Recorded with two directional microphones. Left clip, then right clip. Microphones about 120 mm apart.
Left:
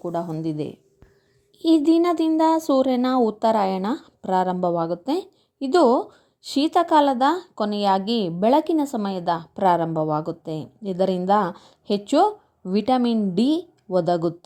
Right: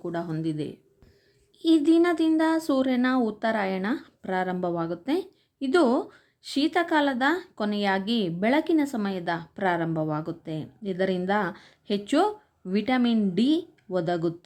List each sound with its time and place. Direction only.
0.1 s a woman's voice: 30° left (ahead or behind)
1.7 s a sound: 30° left (ahead or behind)
2.4 s a woman's voice: 30° left (ahead or behind)
7.6 s a woman's voice: 15° right (ahead or behind)
7.9 s a woman's voice: 30° left (ahead or behind)